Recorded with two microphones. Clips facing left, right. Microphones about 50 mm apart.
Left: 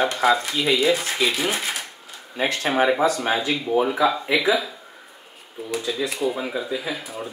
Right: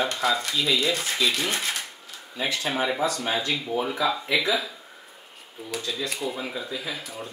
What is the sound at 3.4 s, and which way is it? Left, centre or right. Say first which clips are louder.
Speech: left 5 dB; centre.